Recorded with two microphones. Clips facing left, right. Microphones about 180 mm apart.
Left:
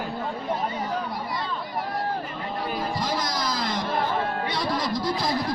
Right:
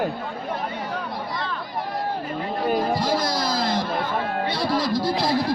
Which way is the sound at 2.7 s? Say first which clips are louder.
Right 9 dB; 50° right (ahead or behind).